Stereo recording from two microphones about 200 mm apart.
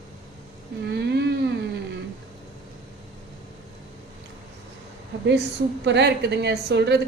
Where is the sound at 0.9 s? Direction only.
55° right (ahead or behind).